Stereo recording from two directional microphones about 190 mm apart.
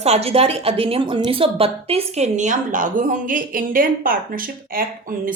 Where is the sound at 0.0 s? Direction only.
35° right (ahead or behind).